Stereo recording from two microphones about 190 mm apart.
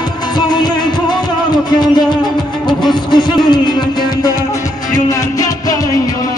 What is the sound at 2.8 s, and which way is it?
Music, 25° left (ahead or behind).